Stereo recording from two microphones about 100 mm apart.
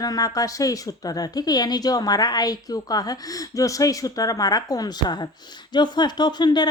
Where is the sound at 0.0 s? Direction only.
40° left (ahead or behind).